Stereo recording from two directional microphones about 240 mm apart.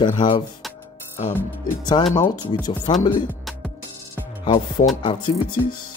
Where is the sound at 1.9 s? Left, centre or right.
Left.